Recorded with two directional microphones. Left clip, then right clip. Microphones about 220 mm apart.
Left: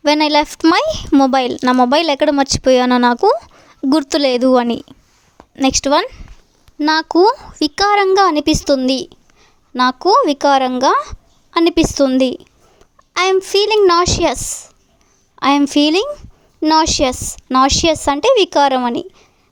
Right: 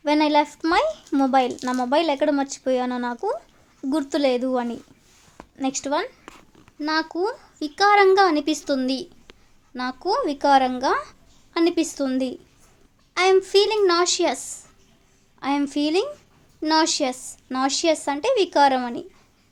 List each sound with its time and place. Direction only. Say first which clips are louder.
0.0 s speech: left 6 dB; 45° left (ahead or behind)